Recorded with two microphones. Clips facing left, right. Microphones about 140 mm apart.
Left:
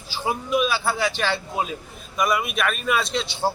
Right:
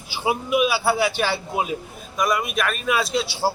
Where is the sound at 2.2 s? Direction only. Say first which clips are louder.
Even; centre (ahead or behind).